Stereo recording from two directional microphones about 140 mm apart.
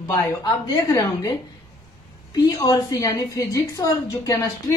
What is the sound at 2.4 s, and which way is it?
A woman's voice, 25° left (ahead or behind).